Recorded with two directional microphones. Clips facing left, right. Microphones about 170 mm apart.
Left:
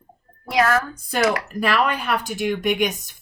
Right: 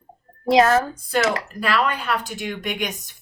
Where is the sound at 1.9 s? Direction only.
15° left (ahead or behind).